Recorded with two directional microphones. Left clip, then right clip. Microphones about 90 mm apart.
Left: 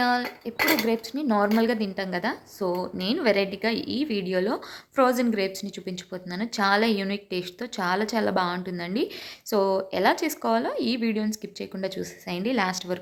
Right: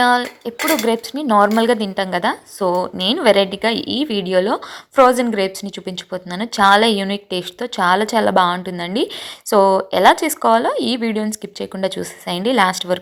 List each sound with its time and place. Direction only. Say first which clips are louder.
0.0 s speech: right 9 dB; 45° right (ahead or behind)
9.5 s speech: right 11 dB; 55° right (ahead or behind)